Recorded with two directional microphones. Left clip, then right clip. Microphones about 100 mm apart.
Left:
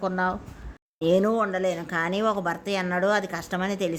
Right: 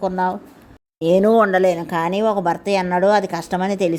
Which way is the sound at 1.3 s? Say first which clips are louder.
Right 10 dB; 90° right.